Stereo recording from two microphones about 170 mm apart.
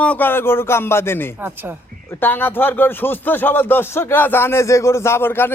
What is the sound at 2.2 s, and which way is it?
Speech, 10° left (ahead or behind).